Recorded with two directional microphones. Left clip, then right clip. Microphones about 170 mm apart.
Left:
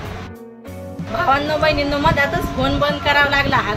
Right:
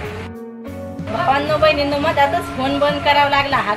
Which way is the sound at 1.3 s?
15° left (ahead or behind).